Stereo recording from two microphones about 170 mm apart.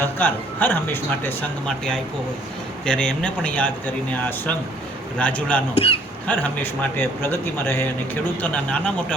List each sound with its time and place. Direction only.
0.0 s a man's voice: 10° left (ahead or behind)
5.7 s speech: 35° left (ahead or behind)
6.2 s speech: 10° left (ahead or behind)